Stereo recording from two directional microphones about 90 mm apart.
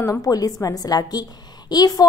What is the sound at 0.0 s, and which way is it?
A woman's voice, 40° left (ahead or behind).